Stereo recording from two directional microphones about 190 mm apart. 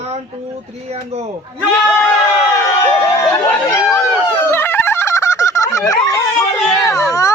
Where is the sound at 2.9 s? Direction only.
10° left (ahead or behind).